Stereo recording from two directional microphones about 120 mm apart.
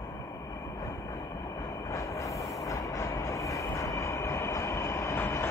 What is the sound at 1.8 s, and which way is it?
Train, 25° left (ahead or behind).